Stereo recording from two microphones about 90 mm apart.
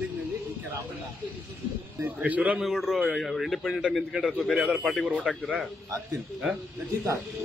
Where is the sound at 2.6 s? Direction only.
5° right (ahead or behind).